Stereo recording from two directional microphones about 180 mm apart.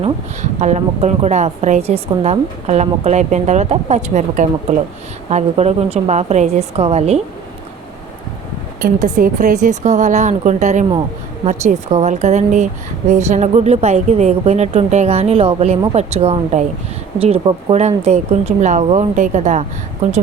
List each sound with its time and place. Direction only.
0.6 s a woman's voice: 40° right (ahead or behind)
8.8 s a woman's voice: 45° right (ahead or behind)